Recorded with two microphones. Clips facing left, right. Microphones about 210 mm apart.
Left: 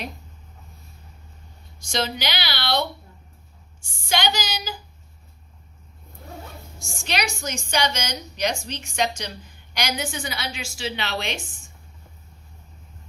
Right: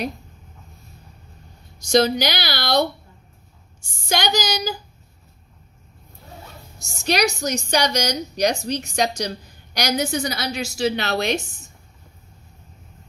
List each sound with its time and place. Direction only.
1.8 s a woman's voice: 40° right (ahead or behind)
4.1 s a woman's voice: 40° right (ahead or behind)
6.8 s a woman's voice: 40° right (ahead or behind)